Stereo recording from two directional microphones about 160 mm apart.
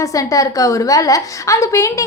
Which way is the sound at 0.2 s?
20° left (ahead or behind).